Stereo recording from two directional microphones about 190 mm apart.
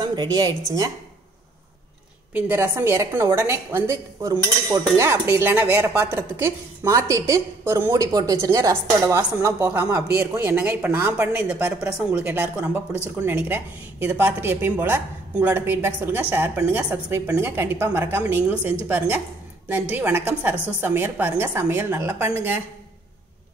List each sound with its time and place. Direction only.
0.0 s a woman's voice: 20° right (ahead or behind)
2.3 s dishes: 10° right (ahead or behind)